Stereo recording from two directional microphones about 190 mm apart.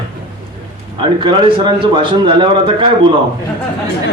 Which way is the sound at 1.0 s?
25° right (ahead or behind).